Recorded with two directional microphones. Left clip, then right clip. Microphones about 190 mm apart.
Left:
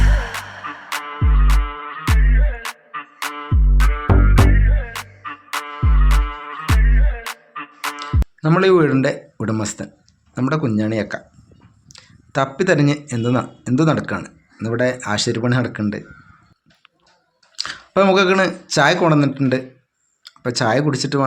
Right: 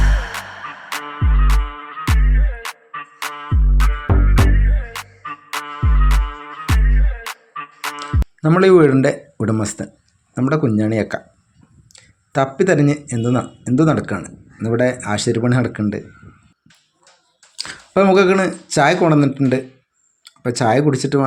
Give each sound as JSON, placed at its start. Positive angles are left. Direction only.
{"t": 0.9, "sound": "music", "side_deg": 0}
{"t": 8.4, "sound": "speech", "side_deg": -20}
{"t": 17.6, "sound": "speech", "side_deg": -15}